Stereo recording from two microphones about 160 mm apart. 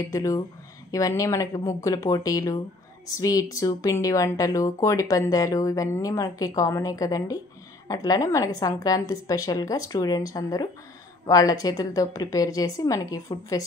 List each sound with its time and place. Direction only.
0.0 s speech: 20° left (ahead or behind)